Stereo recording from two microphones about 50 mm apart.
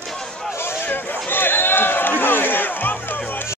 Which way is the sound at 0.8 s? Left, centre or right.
Left.